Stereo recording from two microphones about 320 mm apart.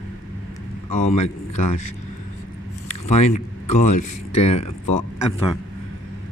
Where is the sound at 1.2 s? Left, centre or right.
Left.